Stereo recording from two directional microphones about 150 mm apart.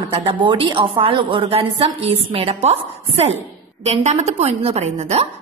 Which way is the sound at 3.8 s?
45° right (ahead or behind).